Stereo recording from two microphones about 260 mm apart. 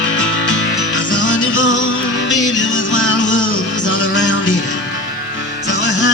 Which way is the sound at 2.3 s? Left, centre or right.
Left.